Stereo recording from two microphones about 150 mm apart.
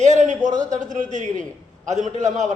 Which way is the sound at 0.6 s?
55° right (ahead or behind).